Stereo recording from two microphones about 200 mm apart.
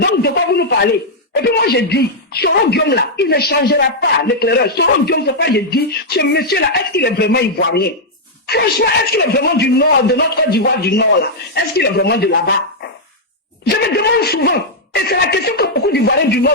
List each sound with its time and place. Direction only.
0.0 s a sound: 55° left (ahead or behind)
1.3 s speech: 50° left (ahead or behind)
13.7 s speech: 55° left (ahead or behind)